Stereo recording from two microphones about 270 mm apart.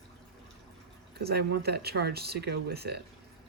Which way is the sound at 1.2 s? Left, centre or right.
Right.